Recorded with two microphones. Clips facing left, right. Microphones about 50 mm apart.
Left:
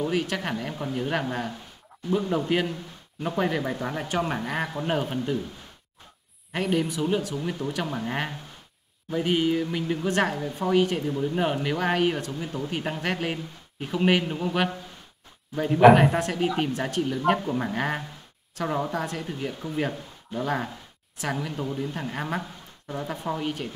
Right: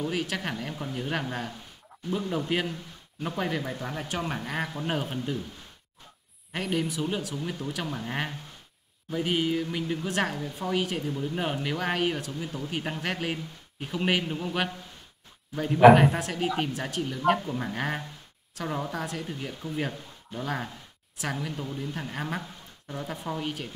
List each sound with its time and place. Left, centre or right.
0.1 s speech: centre
6.5 s speech: centre
10.8 s speech: centre
11.1 s speech: centre
11.3 s speech: centre
12.3 s speech: centre
12.6 s speech: centre
17.4 s speech: centre
22.4 s a sound: centre
23.4 s speech: centre